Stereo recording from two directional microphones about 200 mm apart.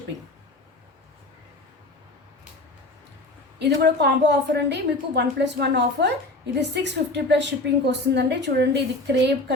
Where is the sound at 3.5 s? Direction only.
55° right (ahead or behind).